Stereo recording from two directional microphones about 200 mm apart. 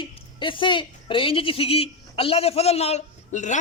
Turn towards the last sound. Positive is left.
turn(degrees=35)  # may be behind; listen again after turning